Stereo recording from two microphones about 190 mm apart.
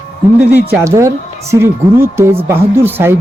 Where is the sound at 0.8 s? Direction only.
15° right (ahead or behind).